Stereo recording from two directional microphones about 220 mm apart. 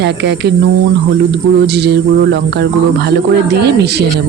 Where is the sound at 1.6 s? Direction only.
45° right (ahead or behind).